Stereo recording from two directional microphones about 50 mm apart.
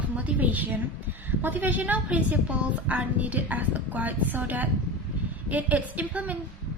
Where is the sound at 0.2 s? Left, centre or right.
Right.